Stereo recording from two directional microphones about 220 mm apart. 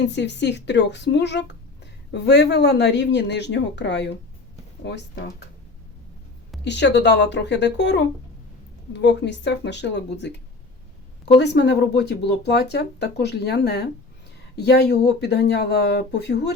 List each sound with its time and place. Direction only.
0.0 s speech: 50° left (ahead or behind)
6.7 s speech: 50° left (ahead or behind)